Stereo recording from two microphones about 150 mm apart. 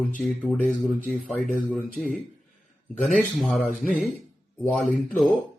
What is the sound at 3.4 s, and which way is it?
A man's voice, centre (ahead or behind).